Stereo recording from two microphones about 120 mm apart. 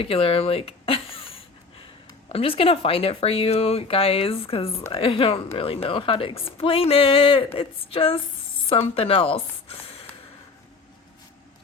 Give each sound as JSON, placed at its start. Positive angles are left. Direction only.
{"t": 0.0, "sound": "speech", "side_deg": 50}